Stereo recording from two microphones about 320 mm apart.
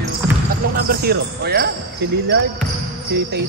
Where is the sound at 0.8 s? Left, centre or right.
Right.